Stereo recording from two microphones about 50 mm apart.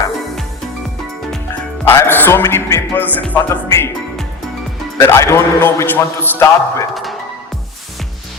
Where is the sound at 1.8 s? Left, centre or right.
Left.